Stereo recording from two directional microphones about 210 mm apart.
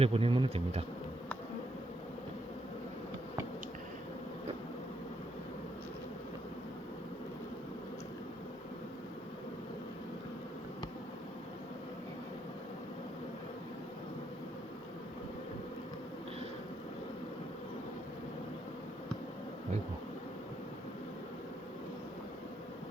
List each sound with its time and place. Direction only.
0.0 s bee: 25° right (ahead or behind)